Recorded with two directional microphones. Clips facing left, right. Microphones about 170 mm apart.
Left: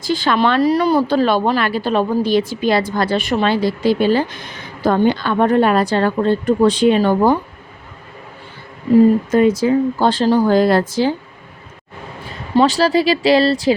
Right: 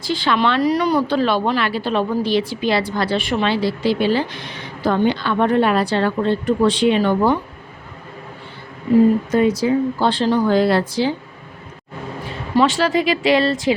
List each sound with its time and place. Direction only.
0.0 s speech: 45° left (ahead or behind)
9.3 s speech: 50° left (ahead or behind)
12.5 s speech: 35° left (ahead or behind)